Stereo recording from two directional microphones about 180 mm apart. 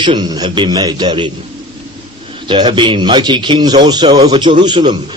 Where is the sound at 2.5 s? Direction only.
25° right (ahead or behind).